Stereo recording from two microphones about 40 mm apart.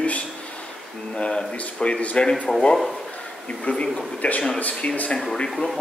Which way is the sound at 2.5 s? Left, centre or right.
Centre.